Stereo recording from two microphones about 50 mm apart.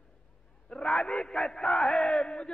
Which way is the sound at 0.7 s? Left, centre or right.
Centre.